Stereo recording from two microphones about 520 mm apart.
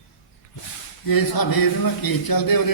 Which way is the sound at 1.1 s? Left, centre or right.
Left.